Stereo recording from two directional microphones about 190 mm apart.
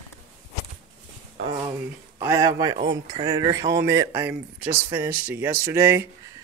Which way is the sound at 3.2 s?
20° right (ahead or behind).